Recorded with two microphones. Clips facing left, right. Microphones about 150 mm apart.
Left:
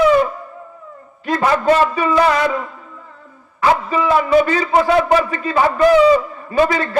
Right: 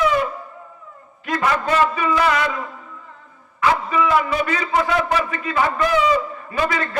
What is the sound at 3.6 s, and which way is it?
A man's voice, 30° left (ahead or behind).